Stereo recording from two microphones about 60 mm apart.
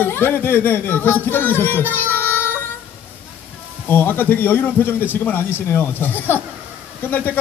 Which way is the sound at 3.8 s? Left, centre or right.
Left.